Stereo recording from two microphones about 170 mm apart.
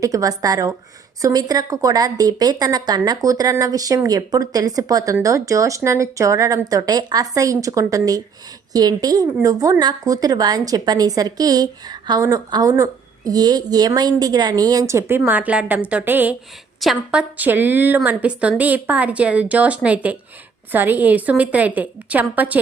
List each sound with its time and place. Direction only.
0.0 s a woman's voice: 20° right (ahead or behind)